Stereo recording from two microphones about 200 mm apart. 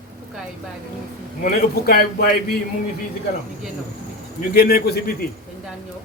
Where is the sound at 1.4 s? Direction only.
45° left (ahead or behind).